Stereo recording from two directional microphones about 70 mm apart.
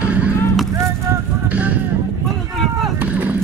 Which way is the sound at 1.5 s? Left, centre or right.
Right.